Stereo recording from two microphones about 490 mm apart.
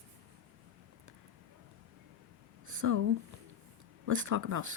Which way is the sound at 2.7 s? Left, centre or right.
Right.